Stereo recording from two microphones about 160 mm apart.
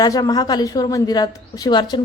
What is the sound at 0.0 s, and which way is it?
A woman's voice, 25° left (ahead or behind).